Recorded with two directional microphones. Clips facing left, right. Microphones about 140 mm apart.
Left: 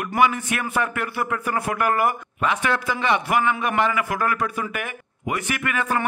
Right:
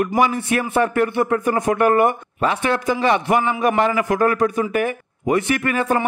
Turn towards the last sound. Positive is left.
turn(degrees=-35)  # may be behind; listen again after turning